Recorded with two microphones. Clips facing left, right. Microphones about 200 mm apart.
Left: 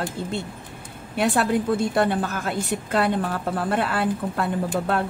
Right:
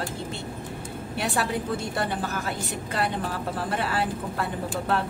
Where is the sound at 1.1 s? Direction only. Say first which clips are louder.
Left 7 dB; 50° left (ahead or behind).